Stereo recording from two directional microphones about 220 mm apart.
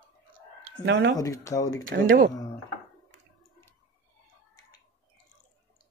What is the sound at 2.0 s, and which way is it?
Speech, 40° right (ahead or behind).